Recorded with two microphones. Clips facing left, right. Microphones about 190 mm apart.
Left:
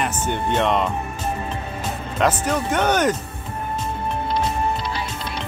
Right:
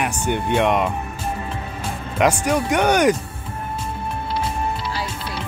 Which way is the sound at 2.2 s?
10° right (ahead or behind).